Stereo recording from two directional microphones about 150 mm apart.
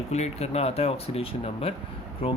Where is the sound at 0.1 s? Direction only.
45° left (ahead or behind).